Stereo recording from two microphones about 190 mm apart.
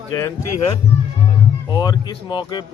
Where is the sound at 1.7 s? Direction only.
20° left (ahead or behind).